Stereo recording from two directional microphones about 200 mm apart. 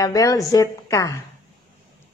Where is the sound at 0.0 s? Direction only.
15° left (ahead or behind).